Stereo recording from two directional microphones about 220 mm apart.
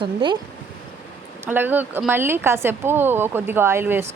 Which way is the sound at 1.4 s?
10° right (ahead or behind).